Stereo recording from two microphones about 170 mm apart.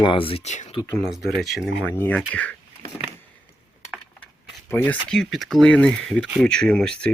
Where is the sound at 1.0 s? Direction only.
Centre (ahead or behind).